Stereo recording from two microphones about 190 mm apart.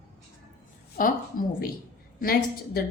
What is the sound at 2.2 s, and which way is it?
Speech, 50° left (ahead or behind).